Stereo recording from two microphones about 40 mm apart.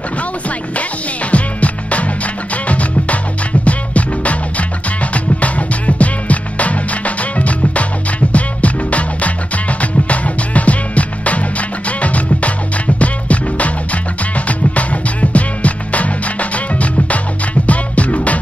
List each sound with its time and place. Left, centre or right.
1.3 s music: left